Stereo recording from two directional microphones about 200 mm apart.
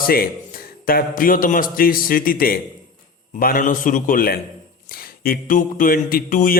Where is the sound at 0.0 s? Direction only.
45° left (ahead or behind).